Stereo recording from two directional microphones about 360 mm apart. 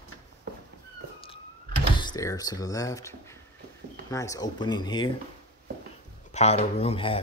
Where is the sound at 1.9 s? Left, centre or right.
Centre.